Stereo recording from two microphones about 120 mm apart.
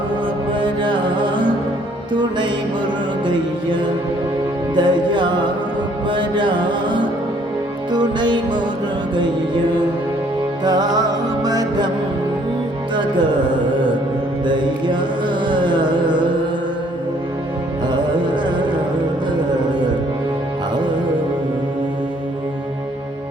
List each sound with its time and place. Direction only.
0.6 s music: 40° right (ahead or behind)
4.7 s music: 40° right (ahead or behind)
10.6 s music: 35° right (ahead or behind)
13.0 s music: 40° right (ahead or behind)